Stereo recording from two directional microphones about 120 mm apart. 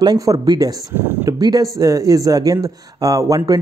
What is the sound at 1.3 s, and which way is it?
Speech, 30° right (ahead or behind).